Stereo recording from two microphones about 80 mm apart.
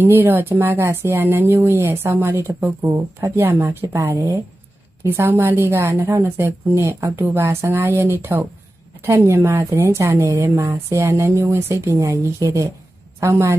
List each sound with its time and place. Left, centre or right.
0.0 s a woman's voice: right